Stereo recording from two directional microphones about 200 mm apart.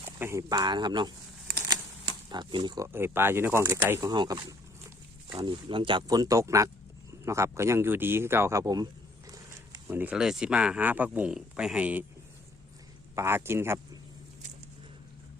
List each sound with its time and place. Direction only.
0.0 s speech: 15° right (ahead or behind)
1.5 s a sound: 20° right (ahead or behind)
2.3 s speech: 20° right (ahead or behind); by 12.0 s 5° right (ahead or behind)
13.1 s speech: 15° right (ahead or behind)